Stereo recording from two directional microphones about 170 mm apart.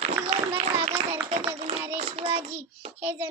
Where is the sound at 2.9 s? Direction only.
10° right (ahead or behind).